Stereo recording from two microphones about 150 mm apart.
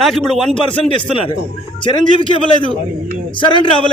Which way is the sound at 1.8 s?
35° left (ahead or behind).